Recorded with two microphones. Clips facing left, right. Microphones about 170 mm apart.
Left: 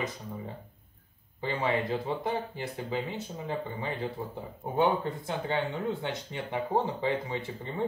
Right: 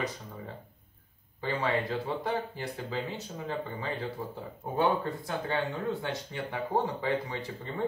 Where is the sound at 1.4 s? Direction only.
20° left (ahead or behind).